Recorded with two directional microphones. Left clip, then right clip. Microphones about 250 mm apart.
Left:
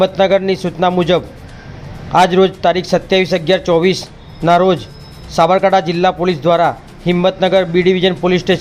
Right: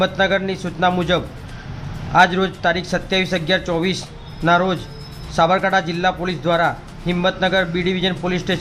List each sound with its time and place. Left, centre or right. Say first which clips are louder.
0.0 s a man's voice: left 6 dB; left